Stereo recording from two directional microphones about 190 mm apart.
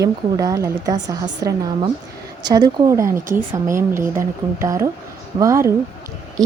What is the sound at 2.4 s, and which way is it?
A woman's voice, 20° right (ahead or behind).